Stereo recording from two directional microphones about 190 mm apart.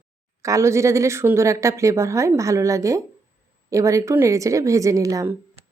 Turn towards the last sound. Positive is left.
turn(degrees=-15)  # may be behind; listen again after turning